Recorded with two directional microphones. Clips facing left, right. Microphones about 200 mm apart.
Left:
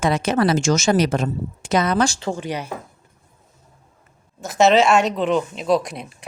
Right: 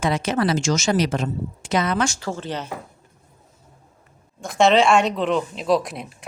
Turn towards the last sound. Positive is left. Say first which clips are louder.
# left 1 dB
turn(degrees=0)  # may be behind; listen again after turning